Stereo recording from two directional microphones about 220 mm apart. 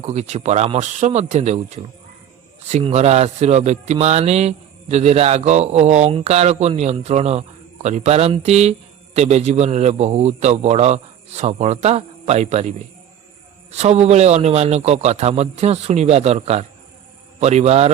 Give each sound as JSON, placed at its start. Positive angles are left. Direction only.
{"t": 0.0, "sound": "speech", "side_deg": -30}